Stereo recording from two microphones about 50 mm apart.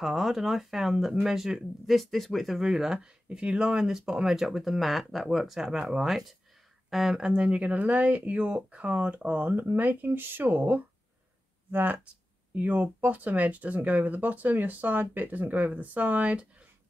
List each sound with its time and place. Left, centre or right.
0.0 s speech: centre
7.2 s speech: right
9.5 s speech: right